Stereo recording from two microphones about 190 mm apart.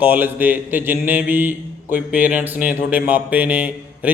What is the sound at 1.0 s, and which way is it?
Mantra, 10° right (ahead or behind).